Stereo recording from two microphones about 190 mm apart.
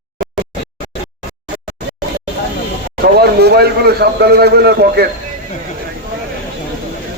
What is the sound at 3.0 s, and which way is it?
A man's voice, 55° right (ahead or behind).